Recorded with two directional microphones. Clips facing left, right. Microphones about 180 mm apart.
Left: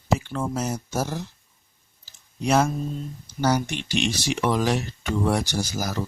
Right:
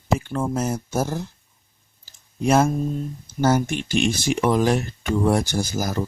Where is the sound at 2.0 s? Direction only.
50° right (ahead or behind).